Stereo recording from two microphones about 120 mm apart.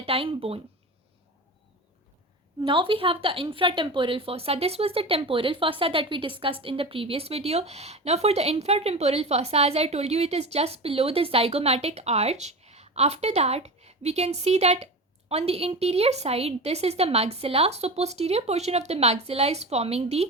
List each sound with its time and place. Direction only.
0.0 s speech: 50° right (ahead or behind)
2.6 s speech: 45° right (ahead or behind); by 20.2 s 60° right (ahead or behind)